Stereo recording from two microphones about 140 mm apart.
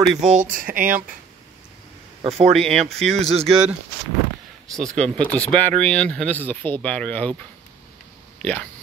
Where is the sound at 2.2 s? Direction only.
50° right (ahead or behind).